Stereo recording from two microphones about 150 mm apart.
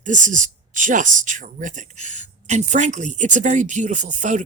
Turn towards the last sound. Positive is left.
turn(degrees=-55)  # may be behind; listen again after turning